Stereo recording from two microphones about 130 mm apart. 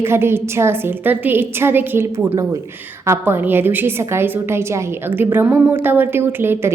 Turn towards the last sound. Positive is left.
turn(degrees=-15)  # may be behind; listen again after turning